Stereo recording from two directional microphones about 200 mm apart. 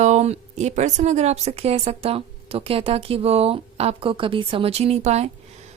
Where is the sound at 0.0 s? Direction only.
35° right (ahead or behind).